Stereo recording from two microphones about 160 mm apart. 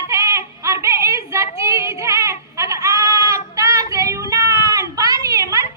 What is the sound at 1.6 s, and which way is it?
Goat, 20° right (ahead or behind).